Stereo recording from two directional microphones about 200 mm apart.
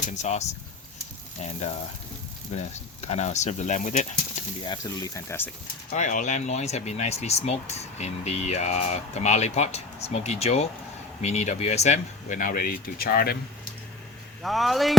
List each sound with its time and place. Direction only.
0.1 s speech: 35° left (ahead or behind)
3.0 s speech: 35° left (ahead or behind)
4.6 s speech: 20° left (ahead or behind)
5.9 s speech: 40° left (ahead or behind)
14.4 s speech: centre (ahead or behind)